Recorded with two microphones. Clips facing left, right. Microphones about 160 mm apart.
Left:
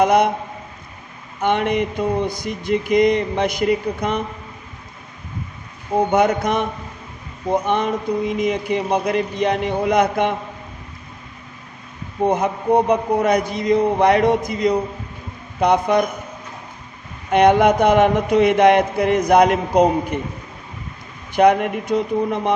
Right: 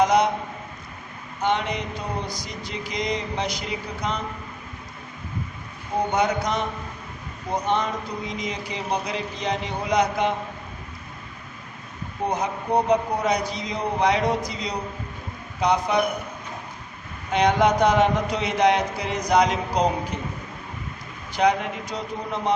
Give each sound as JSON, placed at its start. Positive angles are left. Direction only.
{"t": 0.0, "sound": "mantra", "side_deg": 55}
{"t": 1.4, "sound": "mantra", "side_deg": 55}
{"t": 6.1, "sound": "mantra", "side_deg": 55}
{"t": 12.3, "sound": "a man's voice", "side_deg": 55}
{"t": 17.3, "sound": "mantra", "side_deg": 55}
{"t": 21.3, "sound": "mantra", "side_deg": 55}